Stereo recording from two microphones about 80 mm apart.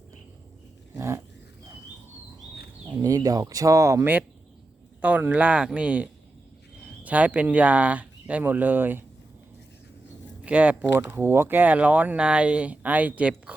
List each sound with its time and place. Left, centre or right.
0.9 s dog: right
3.0 s speech: right
4.9 s speech: centre
10.4 s speech: centre
10.9 s speech: right